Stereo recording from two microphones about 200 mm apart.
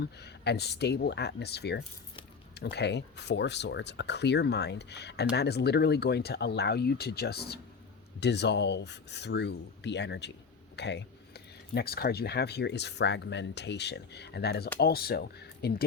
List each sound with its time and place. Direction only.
0.0 s speech: 55° left (ahead or behind)